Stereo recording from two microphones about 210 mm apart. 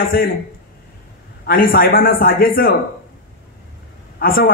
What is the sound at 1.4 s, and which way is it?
A man's voice, 45° left (ahead or behind).